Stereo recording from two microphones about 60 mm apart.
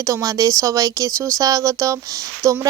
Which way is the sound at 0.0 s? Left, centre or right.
Right.